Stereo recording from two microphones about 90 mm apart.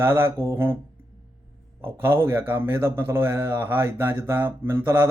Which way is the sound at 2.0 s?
25° right (ahead or behind).